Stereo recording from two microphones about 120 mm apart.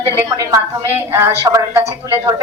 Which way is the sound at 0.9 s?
20° right (ahead or behind).